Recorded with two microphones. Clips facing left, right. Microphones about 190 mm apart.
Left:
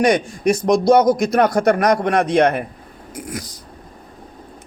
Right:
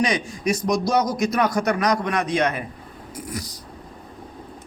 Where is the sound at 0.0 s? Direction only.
55° left (ahead or behind).